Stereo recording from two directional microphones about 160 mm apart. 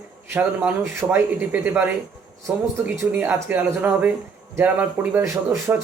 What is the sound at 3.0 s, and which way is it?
Speech, 15° right (ahead or behind).